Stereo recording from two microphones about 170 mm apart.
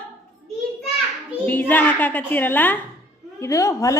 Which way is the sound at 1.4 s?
10° left (ahead or behind).